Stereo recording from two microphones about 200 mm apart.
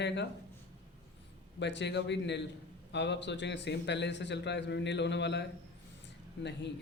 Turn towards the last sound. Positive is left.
turn(degrees=60)  # may be behind; listen again after turning